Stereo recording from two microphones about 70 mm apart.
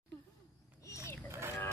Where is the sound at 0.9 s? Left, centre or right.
Left.